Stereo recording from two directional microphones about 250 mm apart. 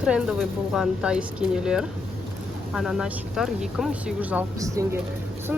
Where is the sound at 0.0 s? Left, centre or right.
Centre.